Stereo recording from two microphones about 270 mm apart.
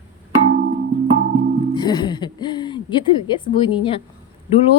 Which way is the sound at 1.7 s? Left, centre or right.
Centre.